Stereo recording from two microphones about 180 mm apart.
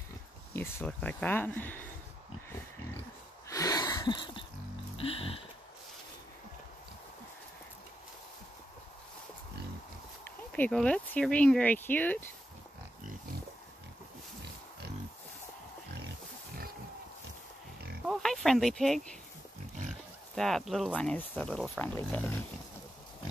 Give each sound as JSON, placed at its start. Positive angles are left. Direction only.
{"t": 0.5, "sound": "speech", "side_deg": 15}
{"t": 3.4, "sound": "wheeze", "side_deg": 20}
{"t": 4.9, "sound": "music", "side_deg": 30}
{"t": 10.5, "sound": "speech", "side_deg": 5}
{"t": 18.0, "sound": "speech", "side_deg": 0}
{"t": 20.3, "sound": "speech", "side_deg": 0}